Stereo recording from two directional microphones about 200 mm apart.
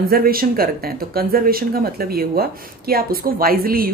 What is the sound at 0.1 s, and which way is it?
Speech, 45° right (ahead or behind).